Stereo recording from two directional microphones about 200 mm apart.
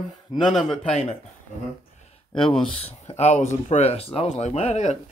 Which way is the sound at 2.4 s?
25° left (ahead or behind).